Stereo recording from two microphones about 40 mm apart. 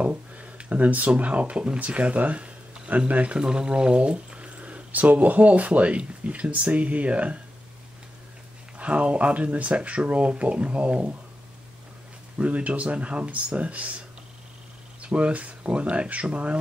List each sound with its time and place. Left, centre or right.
0.0 s speech: right
8.7 s speech: right
12.4 s speech: right